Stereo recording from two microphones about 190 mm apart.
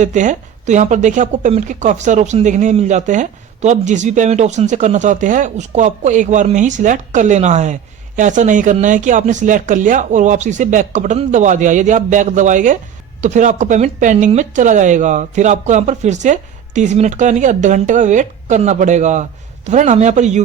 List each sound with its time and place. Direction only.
0.0 s speech: 40° right (ahead or behind)